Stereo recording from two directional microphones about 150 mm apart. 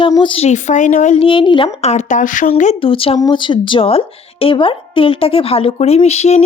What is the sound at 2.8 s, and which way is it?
A woman's voice, 35° left (ahead or behind).